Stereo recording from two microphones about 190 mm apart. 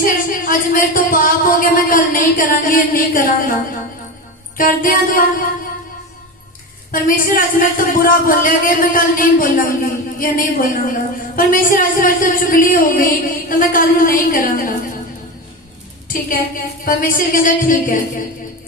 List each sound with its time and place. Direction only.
0.0 s a man's voice: 45° left (ahead or behind)
4.5 s a man's voice: 45° left (ahead or behind)
6.9 s a man's voice: 45° left (ahead or behind)
16.0 s a man's voice: 45° left (ahead or behind)